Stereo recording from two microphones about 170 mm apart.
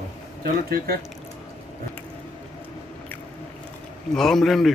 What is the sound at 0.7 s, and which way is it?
Speech, 65° right (ahead or behind).